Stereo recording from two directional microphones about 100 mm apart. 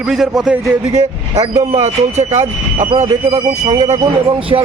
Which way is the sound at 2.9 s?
90° right.